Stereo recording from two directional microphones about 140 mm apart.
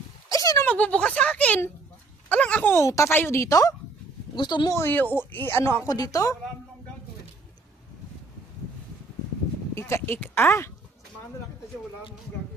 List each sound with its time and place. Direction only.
0.3 s a sound: 25° left (ahead or behind)
0.6 s speech: 10° left (ahead or behind); by 4.7 s 30° left (ahead or behind)
4.7 s speech: 15° left (ahead or behind)
5.9 s a woman's voice: 25° left (ahead or behind)
9.7 s speech: 20° left (ahead or behind)